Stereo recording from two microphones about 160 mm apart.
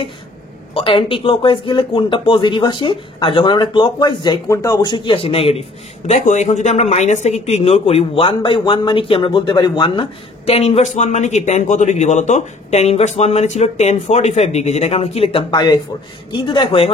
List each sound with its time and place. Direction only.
0.7 s speech: 35° left (ahead or behind)
6.0 s speech: 45° left (ahead or behind)